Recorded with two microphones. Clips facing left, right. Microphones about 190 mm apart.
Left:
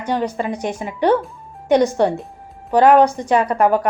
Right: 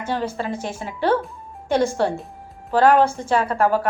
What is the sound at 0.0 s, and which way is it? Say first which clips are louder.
A woman's voice: left 4 dB; 15° left (ahead or behind).